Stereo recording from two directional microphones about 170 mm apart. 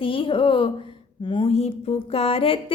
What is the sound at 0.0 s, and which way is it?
Speech, 30° left (ahead or behind).